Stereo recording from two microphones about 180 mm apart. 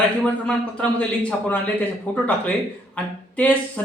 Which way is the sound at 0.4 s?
5° left (ahead or behind).